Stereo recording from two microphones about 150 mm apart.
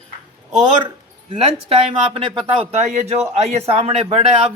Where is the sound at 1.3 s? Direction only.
40° right (ahead or behind).